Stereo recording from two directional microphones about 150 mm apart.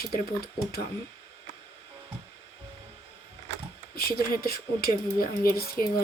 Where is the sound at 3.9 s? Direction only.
90° left.